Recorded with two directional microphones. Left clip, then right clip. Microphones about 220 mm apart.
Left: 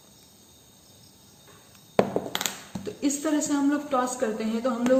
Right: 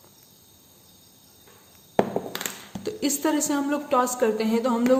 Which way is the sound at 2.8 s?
50° right (ahead or behind).